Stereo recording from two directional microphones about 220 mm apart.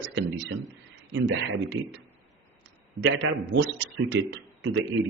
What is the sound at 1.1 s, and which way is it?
Speech, 55° right (ahead or behind).